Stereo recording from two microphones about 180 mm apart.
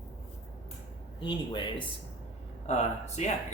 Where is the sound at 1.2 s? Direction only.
25° left (ahead or behind).